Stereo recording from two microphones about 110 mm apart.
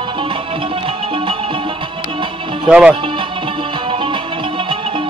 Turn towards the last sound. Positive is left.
turn(degrees=-50)  # may be behind; listen again after turning